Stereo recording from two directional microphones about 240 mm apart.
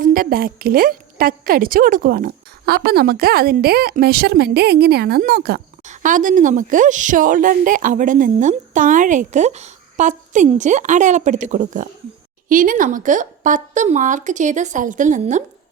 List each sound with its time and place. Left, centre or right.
0.0 s a woman's voice: right